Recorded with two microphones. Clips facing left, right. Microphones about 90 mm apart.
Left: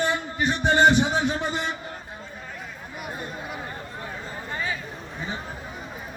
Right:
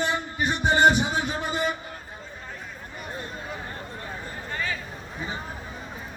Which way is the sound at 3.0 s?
15° left (ahead or behind).